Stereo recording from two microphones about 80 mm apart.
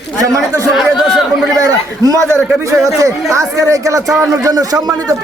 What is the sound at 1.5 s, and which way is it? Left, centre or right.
A man's voice, right.